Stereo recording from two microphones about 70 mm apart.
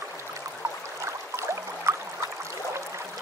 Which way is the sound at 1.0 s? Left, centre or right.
Right.